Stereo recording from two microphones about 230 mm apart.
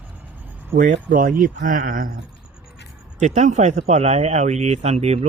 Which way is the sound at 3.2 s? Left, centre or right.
Right.